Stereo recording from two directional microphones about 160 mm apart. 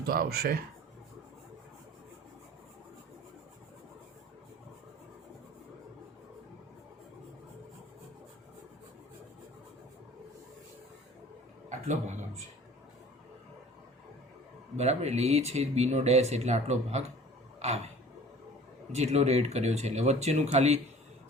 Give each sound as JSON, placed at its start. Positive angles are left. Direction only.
{"t": 0.0, "sound": "speech", "side_deg": -75}
{"t": 11.7, "sound": "speech", "side_deg": -50}
{"t": 14.8, "sound": "speech", "side_deg": -45}
{"t": 17.6, "sound": "a sound", "side_deg": -45}
{"t": 18.9, "sound": "speech", "side_deg": -45}